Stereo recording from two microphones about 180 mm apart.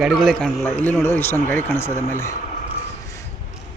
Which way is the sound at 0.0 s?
Centre (ahead or behind).